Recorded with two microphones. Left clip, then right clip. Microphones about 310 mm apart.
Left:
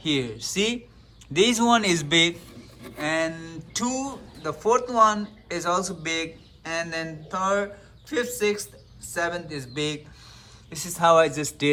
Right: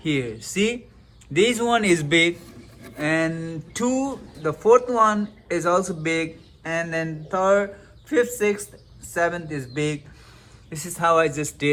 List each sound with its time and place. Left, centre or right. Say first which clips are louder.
0.0 s speech: right 1 dB; centre